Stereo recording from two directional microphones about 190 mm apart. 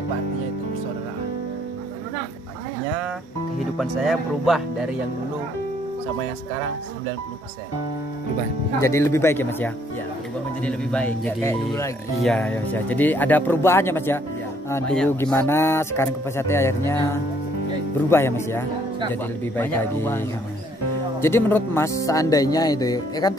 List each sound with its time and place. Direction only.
3.7 s speech: centre (ahead or behind)
8.8 s speech: 15° left (ahead or behind)